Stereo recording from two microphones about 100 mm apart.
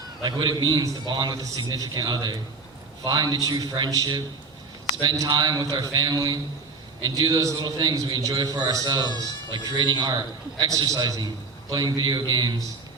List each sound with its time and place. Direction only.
0.2 s a man's voice: 50° right (ahead or behind)
5.2 s a man's voice: 45° right (ahead or behind)